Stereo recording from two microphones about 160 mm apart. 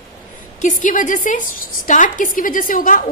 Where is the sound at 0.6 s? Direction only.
50° left (ahead or behind).